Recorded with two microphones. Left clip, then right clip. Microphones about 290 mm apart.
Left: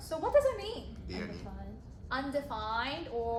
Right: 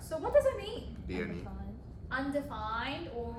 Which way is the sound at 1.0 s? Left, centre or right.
Centre.